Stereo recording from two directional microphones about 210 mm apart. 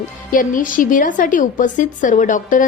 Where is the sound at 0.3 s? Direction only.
40° left (ahead or behind).